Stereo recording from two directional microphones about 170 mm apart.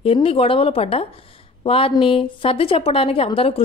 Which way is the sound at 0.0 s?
35° left (ahead or behind).